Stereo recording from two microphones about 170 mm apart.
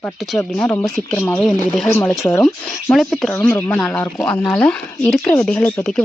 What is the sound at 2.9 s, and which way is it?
Speech, centre (ahead or behind).